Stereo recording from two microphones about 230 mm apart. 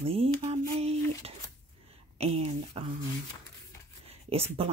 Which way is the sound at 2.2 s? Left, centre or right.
Right.